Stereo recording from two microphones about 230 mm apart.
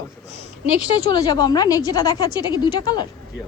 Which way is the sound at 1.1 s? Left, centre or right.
Centre.